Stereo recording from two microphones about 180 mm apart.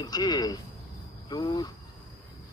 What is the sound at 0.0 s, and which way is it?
A man's voice, 20° left (ahead or behind).